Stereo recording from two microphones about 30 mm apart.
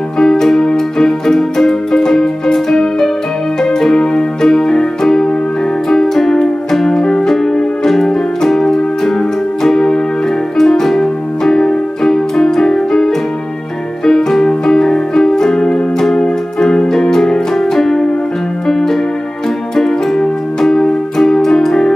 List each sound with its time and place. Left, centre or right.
0.2 s music: centre
4.5 s music: centre
7.0 s music: left
7.8 s music: centre
11.0 s keyboard: centre
14.0 s music: centre
14.4 s keyboard: centre
18.7 s music: centre